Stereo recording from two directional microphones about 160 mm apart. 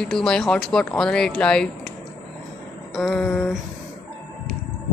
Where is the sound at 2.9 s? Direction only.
5° left (ahead or behind).